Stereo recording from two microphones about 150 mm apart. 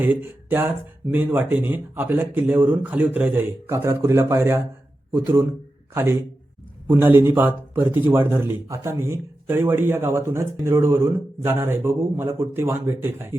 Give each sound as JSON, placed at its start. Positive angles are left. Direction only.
{"t": 0.0, "sound": "speech", "side_deg": -10}